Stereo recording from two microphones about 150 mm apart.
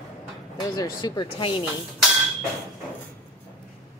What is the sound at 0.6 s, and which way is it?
Speech, 25° left (ahead or behind).